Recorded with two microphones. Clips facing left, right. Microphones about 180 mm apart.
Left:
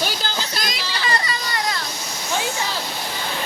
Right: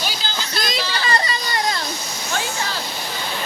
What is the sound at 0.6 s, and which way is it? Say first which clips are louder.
Children playing: right 3 dB; 25° right (ahead or behind).